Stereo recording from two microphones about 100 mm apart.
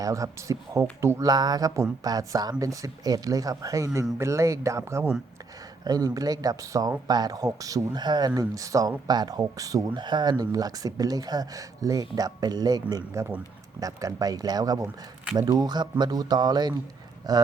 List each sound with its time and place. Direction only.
0.0 s speech: 30° right (ahead or behind)
1.2 s speech: 40° right (ahead or behind)
8.0 s speech: 50° right (ahead or behind)
8.4 s speech: 35° right (ahead or behind)